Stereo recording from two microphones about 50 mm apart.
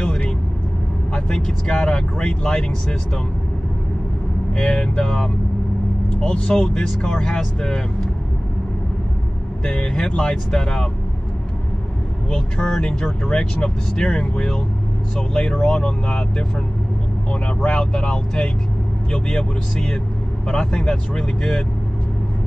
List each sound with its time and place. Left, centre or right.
1.1 s speech: centre
4.6 s speech: centre
9.7 s speech: centre
12.3 s speech: centre